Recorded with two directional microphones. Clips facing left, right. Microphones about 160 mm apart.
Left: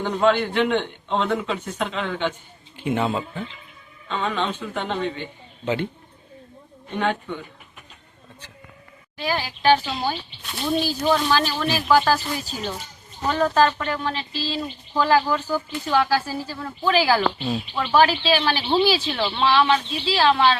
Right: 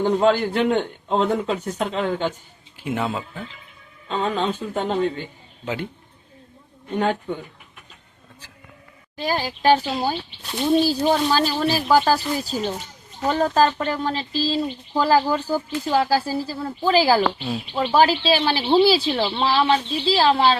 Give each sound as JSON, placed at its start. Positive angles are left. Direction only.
{"t": 0.0, "sound": "speech", "side_deg": -40}
{"t": 2.7, "sound": "speech", "side_deg": -5}
{"t": 4.1, "sound": "speech", "side_deg": -35}
{"t": 5.6, "sound": "speech", "side_deg": -5}
{"t": 7.0, "sound": "speech", "side_deg": -40}
{"t": 9.1, "sound": "speech", "side_deg": -40}